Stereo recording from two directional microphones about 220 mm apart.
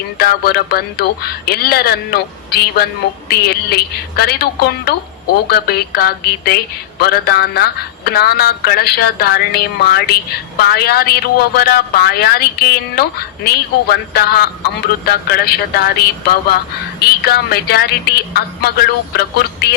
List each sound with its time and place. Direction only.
0.2 s a woman's voice: 45° left (ahead or behind)
17.2 s a woman's voice: 45° left (ahead or behind)